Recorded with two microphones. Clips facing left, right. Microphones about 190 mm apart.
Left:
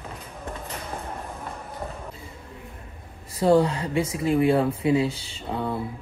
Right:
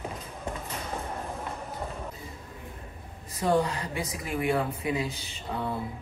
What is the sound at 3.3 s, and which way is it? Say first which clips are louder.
Speech: left 6 dB; 30° left (ahead or behind).